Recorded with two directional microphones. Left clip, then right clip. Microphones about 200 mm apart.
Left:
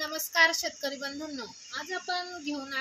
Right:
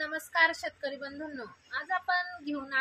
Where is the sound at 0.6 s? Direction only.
45° left (ahead or behind).